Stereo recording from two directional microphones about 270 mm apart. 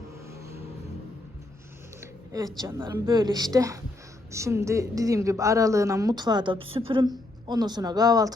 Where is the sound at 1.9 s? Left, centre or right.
Centre.